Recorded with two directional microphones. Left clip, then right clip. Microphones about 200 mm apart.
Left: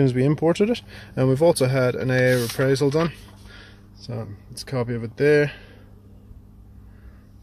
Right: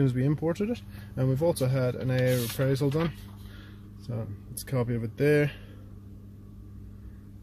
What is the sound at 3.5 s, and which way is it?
Speech, 20° left (ahead or behind).